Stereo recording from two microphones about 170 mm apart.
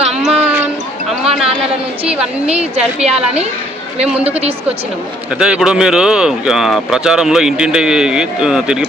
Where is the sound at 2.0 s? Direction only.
5° right (ahead or behind).